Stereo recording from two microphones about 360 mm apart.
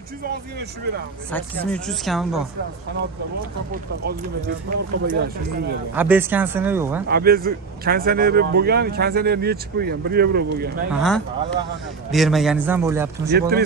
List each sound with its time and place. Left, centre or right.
0.2 s speech: right
1.3 s speech: centre
4.6 s speech: right
5.9 s speech: centre
7.1 s speech: right
10.9 s speech: centre
13.3 s speech: right